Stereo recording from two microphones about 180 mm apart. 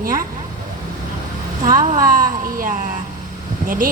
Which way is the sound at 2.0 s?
50° right (ahead or behind).